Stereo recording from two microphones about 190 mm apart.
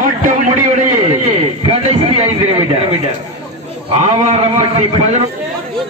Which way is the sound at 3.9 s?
35° right (ahead or behind).